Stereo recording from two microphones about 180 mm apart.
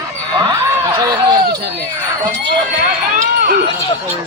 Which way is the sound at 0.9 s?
20° right (ahead or behind).